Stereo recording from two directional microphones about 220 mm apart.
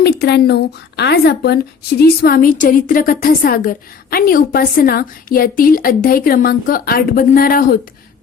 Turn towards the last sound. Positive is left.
turn(degrees=40)  # may be behind; listen again after turning